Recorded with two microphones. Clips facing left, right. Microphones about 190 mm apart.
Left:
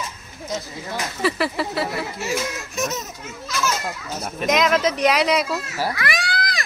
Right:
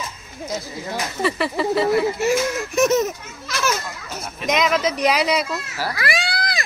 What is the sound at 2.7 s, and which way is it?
Speech, 65° right (ahead or behind).